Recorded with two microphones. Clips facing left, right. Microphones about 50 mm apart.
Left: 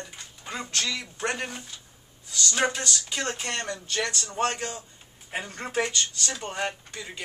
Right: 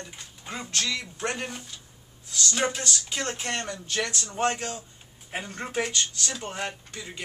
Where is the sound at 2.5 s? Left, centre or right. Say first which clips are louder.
Left 2 dB; centre.